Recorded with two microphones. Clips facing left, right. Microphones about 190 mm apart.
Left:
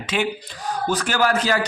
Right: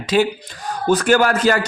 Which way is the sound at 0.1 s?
35° right (ahead or behind).